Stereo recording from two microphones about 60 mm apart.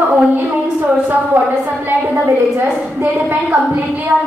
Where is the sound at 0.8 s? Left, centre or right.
Right.